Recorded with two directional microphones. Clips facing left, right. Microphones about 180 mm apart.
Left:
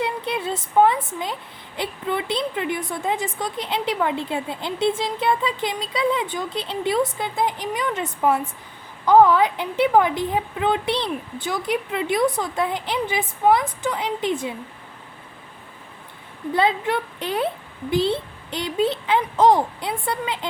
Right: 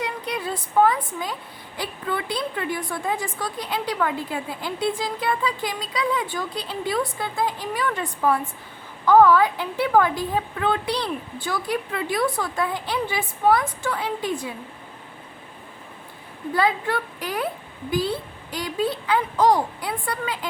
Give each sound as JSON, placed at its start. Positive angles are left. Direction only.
{"t": 0.0, "sound": "a woman's voice", "side_deg": 25}
{"t": 16.5, "sound": "a woman's voice", "side_deg": 25}